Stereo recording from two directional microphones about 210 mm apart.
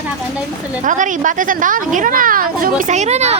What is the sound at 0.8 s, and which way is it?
A woman's voice, 35° right (ahead or behind).